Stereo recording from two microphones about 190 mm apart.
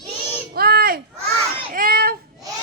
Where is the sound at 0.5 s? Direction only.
55° right (ahead or behind).